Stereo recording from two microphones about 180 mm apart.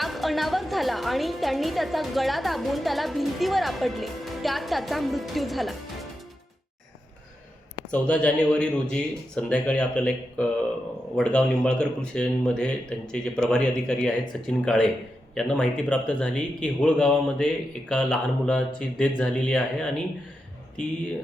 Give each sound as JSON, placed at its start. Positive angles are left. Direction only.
{"t": 0.0, "sound": "a woman's voice", "side_deg": 0}
{"t": 7.9, "sound": "a woman's voice", "side_deg": 5}